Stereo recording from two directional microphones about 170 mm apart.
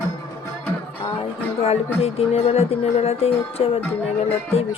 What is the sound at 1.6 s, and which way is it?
A woman's voice, 35° left (ahead or behind).